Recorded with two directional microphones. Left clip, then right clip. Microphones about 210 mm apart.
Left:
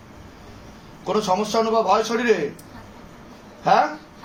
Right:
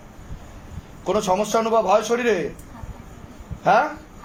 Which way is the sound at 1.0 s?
50° right (ahead or behind).